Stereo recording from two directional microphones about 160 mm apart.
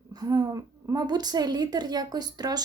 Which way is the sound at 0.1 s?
25° right (ahead or behind).